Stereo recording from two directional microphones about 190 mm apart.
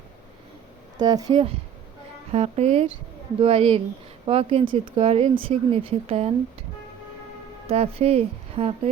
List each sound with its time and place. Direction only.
0.9 s speech: 20° right (ahead or behind)
7.7 s speech: 30° right (ahead or behind)